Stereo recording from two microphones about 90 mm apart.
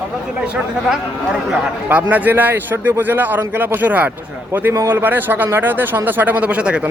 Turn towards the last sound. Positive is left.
turn(degrees=-10)  # may be behind; listen again after turning